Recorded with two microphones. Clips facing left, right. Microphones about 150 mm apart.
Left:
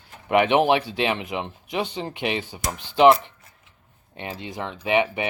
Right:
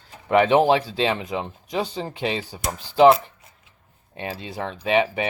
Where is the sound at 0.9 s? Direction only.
15° left (ahead or behind).